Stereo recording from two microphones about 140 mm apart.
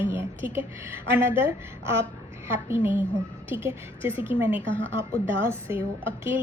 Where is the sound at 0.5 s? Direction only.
15° right (ahead or behind).